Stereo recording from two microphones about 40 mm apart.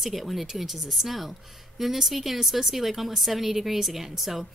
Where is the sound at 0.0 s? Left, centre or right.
Centre.